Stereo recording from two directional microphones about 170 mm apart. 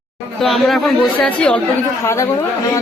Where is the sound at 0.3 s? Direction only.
Centre (ahead or behind).